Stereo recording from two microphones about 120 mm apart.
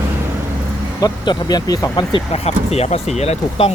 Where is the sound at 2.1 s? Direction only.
55° left (ahead or behind).